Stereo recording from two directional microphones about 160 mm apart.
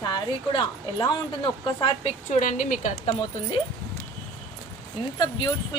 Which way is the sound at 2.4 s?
55° left (ahead or behind).